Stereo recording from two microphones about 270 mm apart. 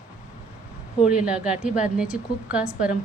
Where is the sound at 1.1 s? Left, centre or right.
Centre.